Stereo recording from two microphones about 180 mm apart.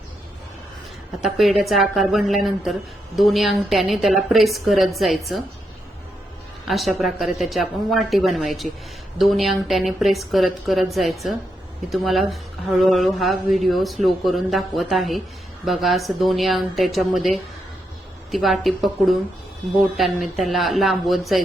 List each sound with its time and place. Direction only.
1.2 s speech: centre (ahead or behind)
6.7 s speech: centre (ahead or behind)